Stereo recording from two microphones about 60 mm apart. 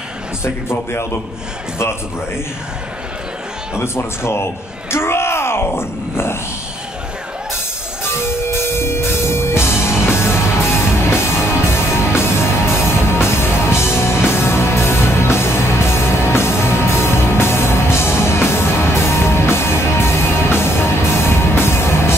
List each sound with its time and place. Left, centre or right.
0.4 s speech: left
3.8 s speech: left
4.9 s bellow: left
5.8 s speech: left
8.3 s music: left